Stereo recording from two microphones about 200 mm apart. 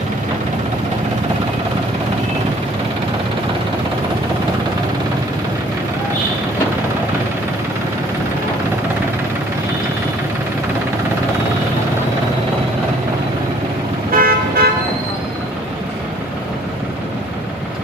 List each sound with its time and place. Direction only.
14.2 s toot: 45° right (ahead or behind)